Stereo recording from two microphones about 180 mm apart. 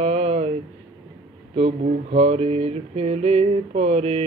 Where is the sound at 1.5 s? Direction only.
35° right (ahead or behind).